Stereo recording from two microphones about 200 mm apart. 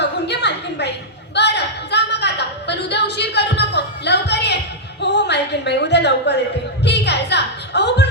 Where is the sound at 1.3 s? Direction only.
55° left (ahead or behind).